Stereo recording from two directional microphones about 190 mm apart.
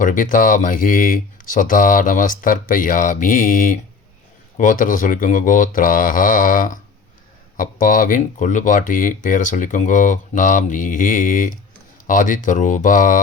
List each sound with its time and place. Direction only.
0.0 s speech: 45° left (ahead or behind)